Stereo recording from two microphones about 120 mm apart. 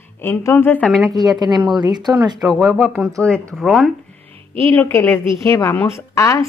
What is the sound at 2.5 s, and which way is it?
Speech, 5° left (ahead or behind).